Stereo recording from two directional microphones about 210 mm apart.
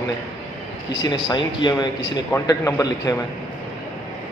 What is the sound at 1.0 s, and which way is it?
A man's voice, 20° left (ahead or behind).